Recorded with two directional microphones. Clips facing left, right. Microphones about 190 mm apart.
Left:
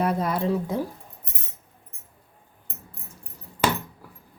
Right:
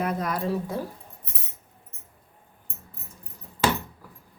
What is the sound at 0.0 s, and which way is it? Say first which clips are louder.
Speech: left 3 dB; 30° left (ahead or behind).